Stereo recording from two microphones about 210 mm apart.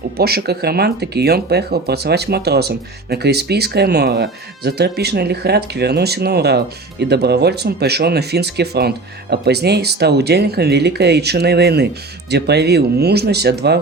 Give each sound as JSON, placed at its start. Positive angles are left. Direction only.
{"t": 0.2, "sound": "speech", "side_deg": -50}